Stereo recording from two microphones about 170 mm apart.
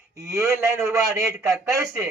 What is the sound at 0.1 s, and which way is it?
A man's voice, 20° right (ahead or behind).